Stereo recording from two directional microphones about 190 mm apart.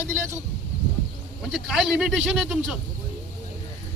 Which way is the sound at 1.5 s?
Centre (ahead or behind).